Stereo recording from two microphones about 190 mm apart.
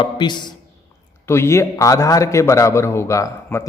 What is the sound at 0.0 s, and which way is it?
A man's voice, 25° left (ahead or behind).